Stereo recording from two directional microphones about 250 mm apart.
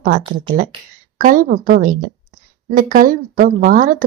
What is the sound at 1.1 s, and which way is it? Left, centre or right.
A woman's voice, right.